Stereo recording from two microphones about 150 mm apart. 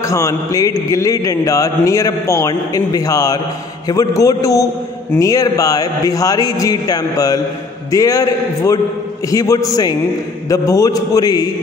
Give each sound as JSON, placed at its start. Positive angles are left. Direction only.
{"t": 0.0, "sound": "a man's voice", "side_deg": 20}